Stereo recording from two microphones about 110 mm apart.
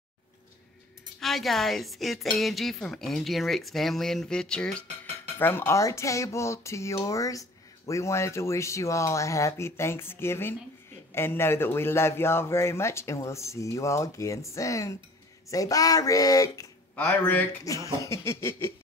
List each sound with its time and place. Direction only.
1.2 s a woman's voice: centre (ahead or behind)
4.8 s speech: 80° right
5.4 s speech: 20° left (ahead or behind)
16.9 s speech: 15° left (ahead or behind)
17.6 s speech: 30° left (ahead or behind)